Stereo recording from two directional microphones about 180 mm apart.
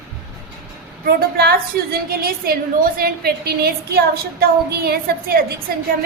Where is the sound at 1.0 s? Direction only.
60° right (ahead or behind).